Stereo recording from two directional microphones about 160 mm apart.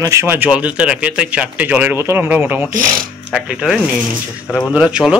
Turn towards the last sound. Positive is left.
turn(degrees=-5)  # may be behind; listen again after turning